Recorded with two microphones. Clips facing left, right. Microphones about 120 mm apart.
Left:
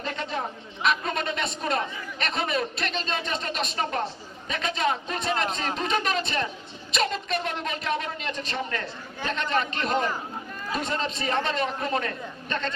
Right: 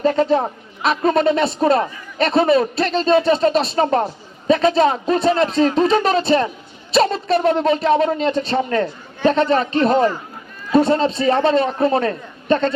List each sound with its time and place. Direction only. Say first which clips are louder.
0.0 s speech: right 15 dB; 35° right (ahead or behind)